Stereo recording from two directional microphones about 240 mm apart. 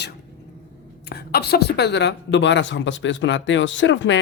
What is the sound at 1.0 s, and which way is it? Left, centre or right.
Speech, left.